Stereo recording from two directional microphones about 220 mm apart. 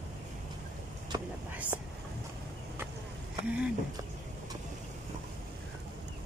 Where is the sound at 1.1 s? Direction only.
20° right (ahead or behind).